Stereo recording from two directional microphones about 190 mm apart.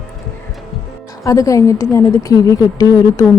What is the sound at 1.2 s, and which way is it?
Speech, 15° left (ahead or behind).